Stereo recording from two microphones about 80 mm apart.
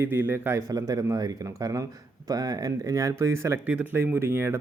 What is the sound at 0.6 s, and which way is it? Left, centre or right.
Speech, right.